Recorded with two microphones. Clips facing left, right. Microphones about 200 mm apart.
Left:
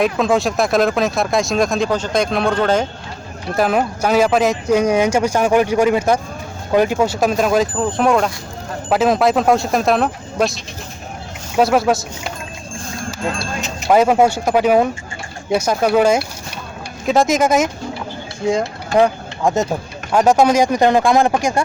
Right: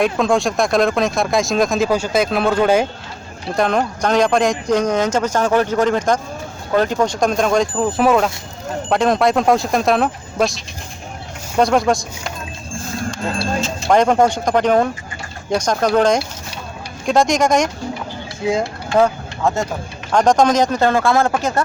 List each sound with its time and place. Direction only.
0.0 s speech: centre (ahead or behind)
3.5 s speech: 5° left (ahead or behind)
13.6 s speech: 15° left (ahead or behind)
18.9 s speech: 15° left (ahead or behind)